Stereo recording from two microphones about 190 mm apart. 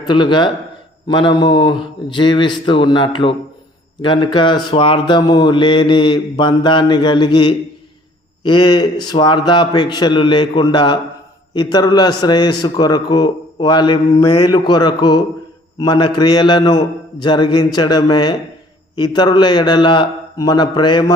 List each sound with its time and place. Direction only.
0.0 s a man's voice: 25° left (ahead or behind)